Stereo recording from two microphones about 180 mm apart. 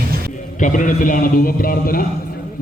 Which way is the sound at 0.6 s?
45° left (ahead or behind).